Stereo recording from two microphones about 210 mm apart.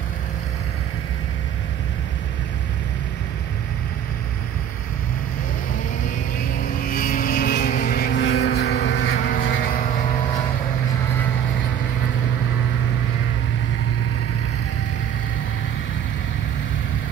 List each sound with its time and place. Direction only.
6.8 s vehicle: 45° left (ahead or behind)